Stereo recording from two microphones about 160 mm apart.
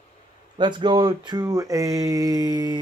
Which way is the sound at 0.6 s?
30° right (ahead or behind).